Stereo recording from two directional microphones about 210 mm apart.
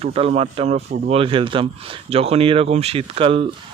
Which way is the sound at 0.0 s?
30° right (ahead or behind).